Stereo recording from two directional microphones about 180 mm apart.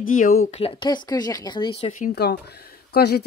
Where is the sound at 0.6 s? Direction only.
30° left (ahead or behind).